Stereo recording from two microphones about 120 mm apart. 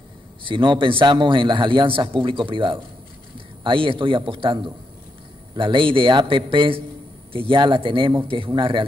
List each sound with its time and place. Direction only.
0.4 s a man's voice: 45° right (ahead or behind)